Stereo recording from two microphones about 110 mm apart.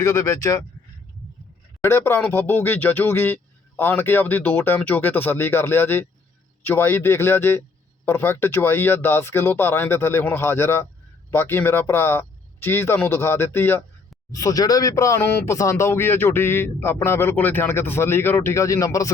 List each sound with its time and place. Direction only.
0.0 s speech: 25° left (ahead or behind)
1.8 s speech: 20° left (ahead or behind)
14.3 s speech: 35° left (ahead or behind)